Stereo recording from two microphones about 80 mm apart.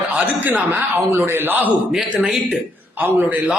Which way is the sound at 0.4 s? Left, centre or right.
Right.